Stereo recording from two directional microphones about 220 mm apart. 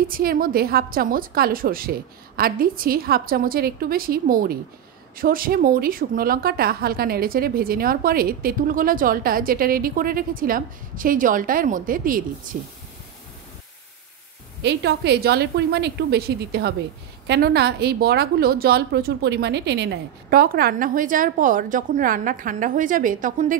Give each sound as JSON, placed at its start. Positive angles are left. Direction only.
{"t": 0.0, "sound": "a woman's voice", "side_deg": -40}
{"t": 14.6, "sound": "a woman's voice", "side_deg": -50}